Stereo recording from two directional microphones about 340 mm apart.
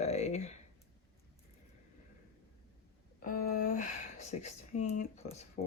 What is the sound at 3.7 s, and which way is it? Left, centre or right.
Speech, left.